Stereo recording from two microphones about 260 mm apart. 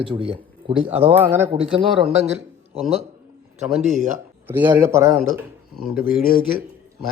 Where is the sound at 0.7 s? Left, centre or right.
Centre.